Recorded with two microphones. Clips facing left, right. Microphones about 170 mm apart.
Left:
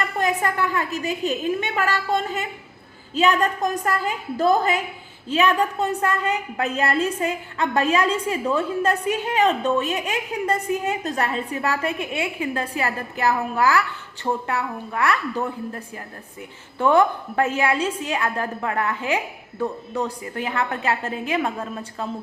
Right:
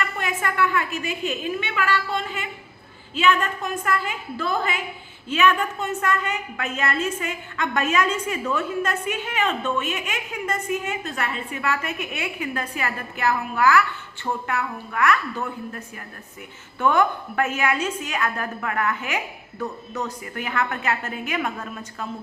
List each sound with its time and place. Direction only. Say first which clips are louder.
0.0 s a woman's voice: left 4 dB; 35° left (ahead or behind)